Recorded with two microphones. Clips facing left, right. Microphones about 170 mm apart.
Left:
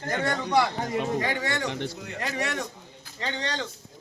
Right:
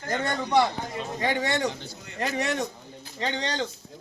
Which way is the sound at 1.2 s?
20° right (ahead or behind).